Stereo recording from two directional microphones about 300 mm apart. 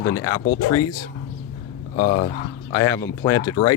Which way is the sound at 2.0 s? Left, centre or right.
Centre.